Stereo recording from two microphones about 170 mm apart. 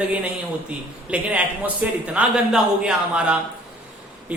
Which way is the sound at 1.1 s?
5° right (ahead or behind).